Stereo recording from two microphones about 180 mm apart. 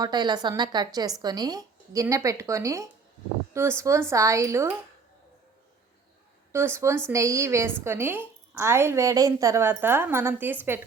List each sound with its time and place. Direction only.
0.0 s a woman's voice: 25° right (ahead or behind)
6.5 s a woman's voice: 15° right (ahead or behind)